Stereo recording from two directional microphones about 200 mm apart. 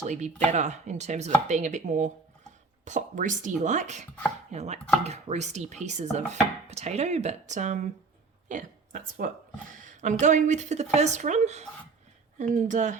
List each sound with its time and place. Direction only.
0.0 s a woman's voice: 35° right (ahead or behind)